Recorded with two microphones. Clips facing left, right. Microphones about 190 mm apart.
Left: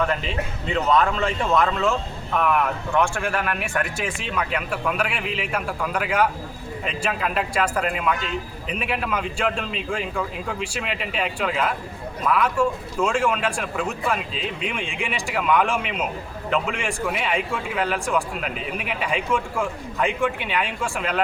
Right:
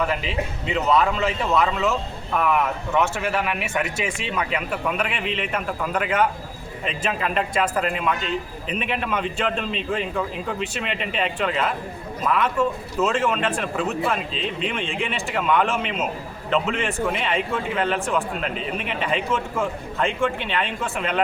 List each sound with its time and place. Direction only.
0.0 s a man's voice: 5° right (ahead or behind)
4.9 s a man's voice: 5° left (ahead or behind)
20.0 s speech: 10° left (ahead or behind)